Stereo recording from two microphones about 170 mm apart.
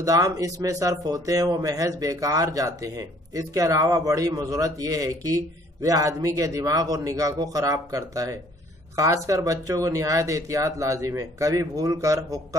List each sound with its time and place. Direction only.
0.0 s speech: 20° right (ahead or behind)